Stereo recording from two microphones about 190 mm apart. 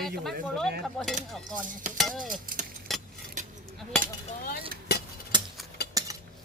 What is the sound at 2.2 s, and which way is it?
Speech, 45° right (ahead or behind).